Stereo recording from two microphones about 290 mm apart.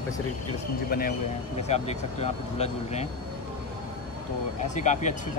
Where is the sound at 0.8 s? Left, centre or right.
Left.